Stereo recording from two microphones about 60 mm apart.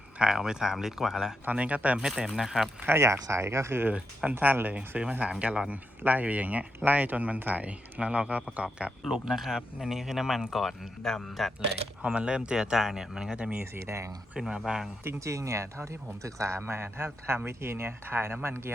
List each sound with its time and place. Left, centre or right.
0.2 s speech: centre
1.5 s speech: right
2.0 s speech: centre
2.9 s speech: right
3.9 s speech: centre
4.6 s speech: right
9.0 s speech: centre
12.0 s speech: centre
13.3 s speech: right
13.7 s speech: right
14.3 s speech: centre
15.2 s speech: right
16.6 s speech: right